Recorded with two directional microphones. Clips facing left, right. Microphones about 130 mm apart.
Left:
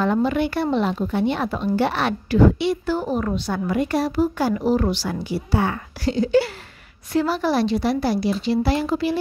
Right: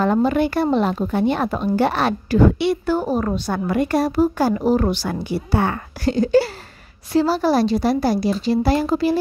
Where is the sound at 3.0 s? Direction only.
35° right (ahead or behind).